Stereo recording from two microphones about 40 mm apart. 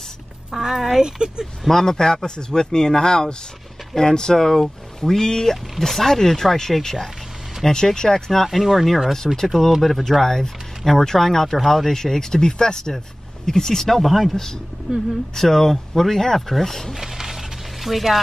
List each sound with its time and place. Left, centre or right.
0.5 s a woman's voice: centre
1.7 s speech: centre
8.5 s speech: centre
10.2 s speech: centre
15.3 s speech: centre
16.9 s a sound: centre